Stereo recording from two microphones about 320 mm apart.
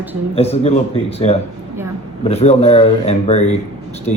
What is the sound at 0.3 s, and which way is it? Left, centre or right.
Speech, centre.